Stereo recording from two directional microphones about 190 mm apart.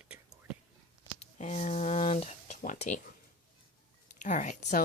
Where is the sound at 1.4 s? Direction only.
35° left (ahead or behind).